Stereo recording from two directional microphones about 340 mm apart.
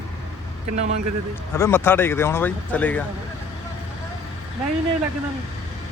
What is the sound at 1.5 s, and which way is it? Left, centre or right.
Speech, centre.